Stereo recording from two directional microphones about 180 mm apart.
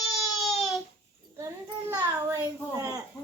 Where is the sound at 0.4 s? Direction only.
Centre (ahead or behind).